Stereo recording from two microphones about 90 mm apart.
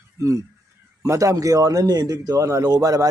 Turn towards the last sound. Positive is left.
turn(degrees=-45)  # may be behind; listen again after turning